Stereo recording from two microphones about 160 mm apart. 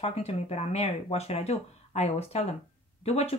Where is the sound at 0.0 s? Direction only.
40° left (ahead or behind).